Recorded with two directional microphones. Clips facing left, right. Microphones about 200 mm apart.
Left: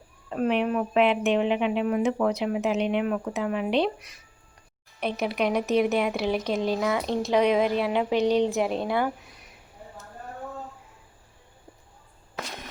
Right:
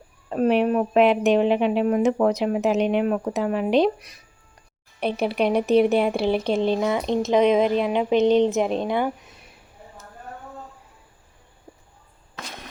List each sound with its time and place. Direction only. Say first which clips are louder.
0.3 s a woman's voice: right 5 dB; 40° right (ahead or behind); by 9.5 s 20° right (ahead or behind)